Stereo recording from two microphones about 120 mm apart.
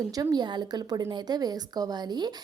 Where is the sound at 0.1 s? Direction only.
30° right (ahead or behind).